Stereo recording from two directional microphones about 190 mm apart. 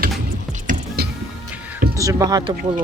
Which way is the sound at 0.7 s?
55° right (ahead or behind).